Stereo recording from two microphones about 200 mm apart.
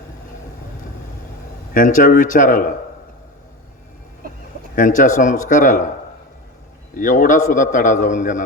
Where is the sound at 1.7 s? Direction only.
40° left (ahead or behind).